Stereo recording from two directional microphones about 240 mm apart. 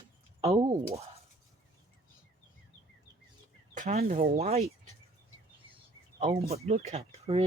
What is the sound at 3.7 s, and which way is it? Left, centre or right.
Speech, right.